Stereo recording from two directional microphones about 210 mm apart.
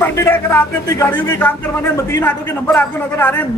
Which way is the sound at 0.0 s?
10° left (ahead or behind).